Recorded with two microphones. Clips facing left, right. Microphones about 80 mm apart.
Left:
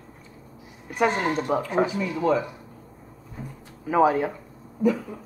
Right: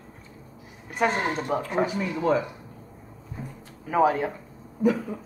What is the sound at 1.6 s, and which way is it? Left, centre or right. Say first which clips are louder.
Speech: left 1 dB; centre.